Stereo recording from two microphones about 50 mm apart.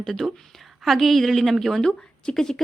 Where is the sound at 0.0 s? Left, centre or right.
Centre.